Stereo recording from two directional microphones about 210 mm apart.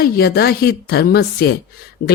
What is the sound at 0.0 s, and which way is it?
Speech, 50° left (ahead or behind).